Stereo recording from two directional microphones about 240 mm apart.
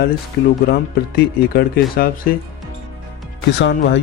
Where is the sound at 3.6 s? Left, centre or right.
Left.